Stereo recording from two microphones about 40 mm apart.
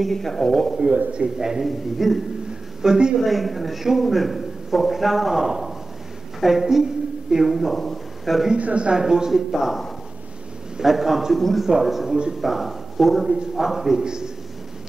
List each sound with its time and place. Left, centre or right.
0.0 s speech: centre
1.4 s a man's voice: centre
1.7 s a man's voice: centre
2.8 s speech: centre
3.2 s a man's voice: centre
7.7 s a man's voice: centre
8.5 s speech: right
9.0 s a man's voice: centre
9.5 s a man's voice: centre
11.3 s a man's voice: centre
11.8 s a man's voice: centre